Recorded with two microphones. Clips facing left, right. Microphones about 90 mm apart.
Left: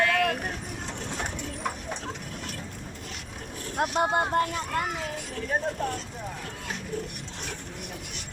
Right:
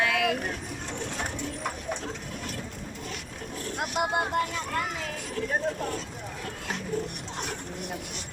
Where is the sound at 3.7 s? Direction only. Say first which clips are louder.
Left 3 dB; 35° left (ahead or behind).